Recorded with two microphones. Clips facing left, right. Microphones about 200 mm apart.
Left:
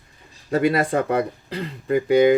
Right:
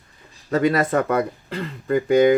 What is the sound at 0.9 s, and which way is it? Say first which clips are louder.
Speech: right 1 dB; 25° left (ahead or behind).